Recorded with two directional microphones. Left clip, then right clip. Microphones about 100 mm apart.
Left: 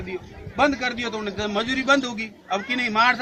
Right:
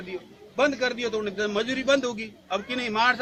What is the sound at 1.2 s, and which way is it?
Speech, 35° right (ahead or behind).